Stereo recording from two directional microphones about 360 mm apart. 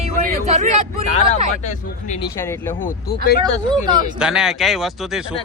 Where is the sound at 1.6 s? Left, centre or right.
Centre.